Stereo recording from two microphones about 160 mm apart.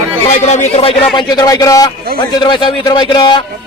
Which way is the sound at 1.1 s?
25° left (ahead or behind).